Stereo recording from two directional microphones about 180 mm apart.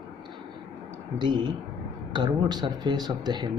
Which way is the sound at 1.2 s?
25° right (ahead or behind).